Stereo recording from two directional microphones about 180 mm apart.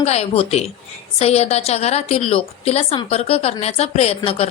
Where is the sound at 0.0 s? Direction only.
35° left (ahead or behind).